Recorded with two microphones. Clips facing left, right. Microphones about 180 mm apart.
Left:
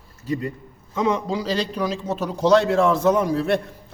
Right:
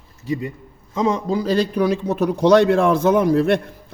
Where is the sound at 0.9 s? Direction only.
35° right (ahead or behind).